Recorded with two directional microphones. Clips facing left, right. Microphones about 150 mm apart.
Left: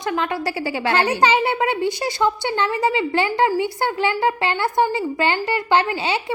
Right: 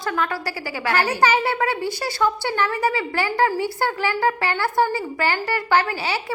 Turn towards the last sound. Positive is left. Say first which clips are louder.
# left 2 dB
turn(degrees=20)  # may be behind; listen again after turning